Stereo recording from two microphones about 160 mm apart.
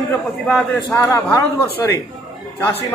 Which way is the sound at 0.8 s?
20° left (ahead or behind).